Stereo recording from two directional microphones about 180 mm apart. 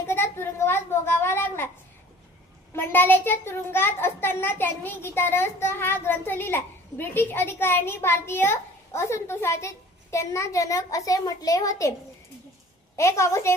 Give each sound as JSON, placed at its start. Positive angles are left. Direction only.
{"t": 0.1, "sound": "a sound", "side_deg": 15}
{"t": 2.7, "sound": "a child's voice", "side_deg": 10}
{"t": 13.0, "sound": "a child's voice", "side_deg": 15}